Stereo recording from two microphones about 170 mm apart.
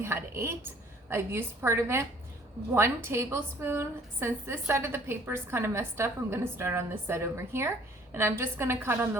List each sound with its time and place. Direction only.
0.0 s a woman's voice: 15° right (ahead or behind)